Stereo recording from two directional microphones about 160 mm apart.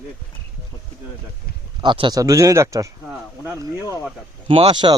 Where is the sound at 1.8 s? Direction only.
30° right (ahead or behind).